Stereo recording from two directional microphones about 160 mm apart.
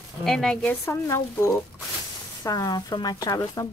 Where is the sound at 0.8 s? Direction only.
15° left (ahead or behind).